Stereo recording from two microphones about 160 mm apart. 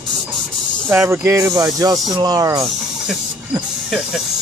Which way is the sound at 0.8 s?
15° right (ahead or behind).